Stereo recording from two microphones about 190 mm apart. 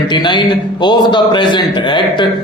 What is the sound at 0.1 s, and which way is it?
A man's voice, 25° left (ahead or behind).